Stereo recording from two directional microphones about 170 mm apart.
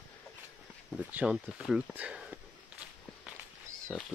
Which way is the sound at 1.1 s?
5° right (ahead or behind).